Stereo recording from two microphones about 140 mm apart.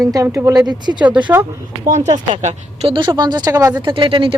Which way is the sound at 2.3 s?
50° right (ahead or behind).